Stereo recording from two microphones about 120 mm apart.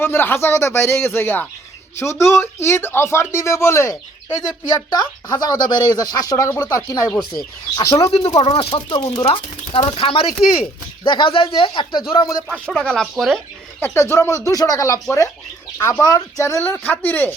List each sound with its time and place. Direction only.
0.0 s speech: 20° left (ahead or behind)
8.1 s speech: 55° left (ahead or behind); by 12.3 s 40° left (ahead or behind)
12.5 s speech: 5° left (ahead or behind)
13.7 s speech: 20° left (ahead or behind)